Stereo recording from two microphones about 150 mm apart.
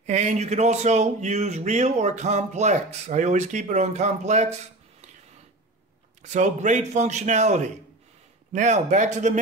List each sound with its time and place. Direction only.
0.0 s speech: 50° right (ahead or behind)
6.2 s speech: 55° right (ahead or behind)